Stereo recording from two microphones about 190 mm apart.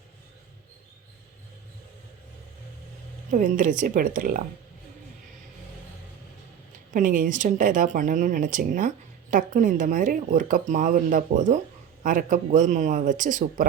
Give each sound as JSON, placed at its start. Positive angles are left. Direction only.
{"t": 3.3, "sound": "speech", "side_deg": -45}
{"t": 6.9, "sound": "speech", "side_deg": -45}